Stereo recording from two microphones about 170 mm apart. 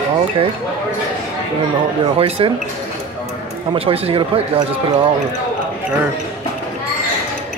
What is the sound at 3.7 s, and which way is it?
Speech, 35° right (ahead or behind).